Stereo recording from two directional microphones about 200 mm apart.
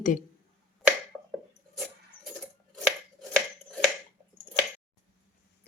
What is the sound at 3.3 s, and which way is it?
Finger snapping, 5° left (ahead or behind).